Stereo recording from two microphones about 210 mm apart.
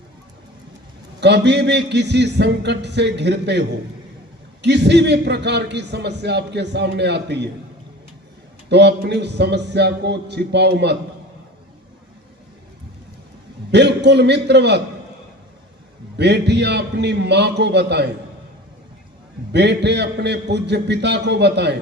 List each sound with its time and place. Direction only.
1.2 s a man's voice: 55° right (ahead or behind)
8.7 s a man's voice: 55° right (ahead or behind)
13.7 s a man's voice: 55° right (ahead or behind)
16.1 s a man's voice: 55° right (ahead or behind)
19.5 s a man's voice: 55° right (ahead or behind)